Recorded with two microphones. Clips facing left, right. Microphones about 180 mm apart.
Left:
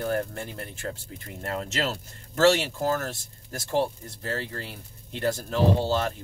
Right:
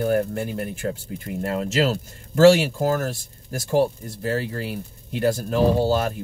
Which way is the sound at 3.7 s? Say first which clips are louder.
Right 6 dB; 10° right (ahead or behind).